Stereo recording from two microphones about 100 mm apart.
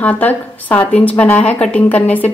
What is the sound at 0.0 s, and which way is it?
A woman's voice, 15° left (ahead or behind).